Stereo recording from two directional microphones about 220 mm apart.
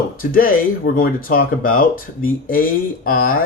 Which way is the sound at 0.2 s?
40° left (ahead or behind).